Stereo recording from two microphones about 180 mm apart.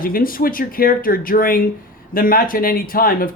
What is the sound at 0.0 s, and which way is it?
Speech, 50° left (ahead or behind).